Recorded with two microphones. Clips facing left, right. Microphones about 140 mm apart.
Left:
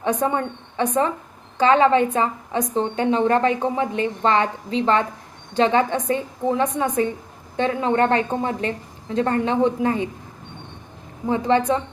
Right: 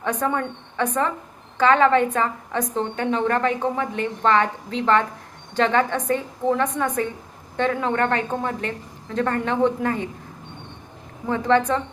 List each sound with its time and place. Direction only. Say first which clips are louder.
0.0 s a woman's voice: left 2 dB; 15° left (ahead or behind)
11.3 s a woman's voice: left 1 dB; 15° left (ahead or behind)